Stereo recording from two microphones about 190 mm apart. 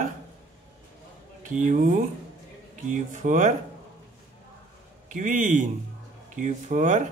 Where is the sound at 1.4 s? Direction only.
40° right (ahead or behind).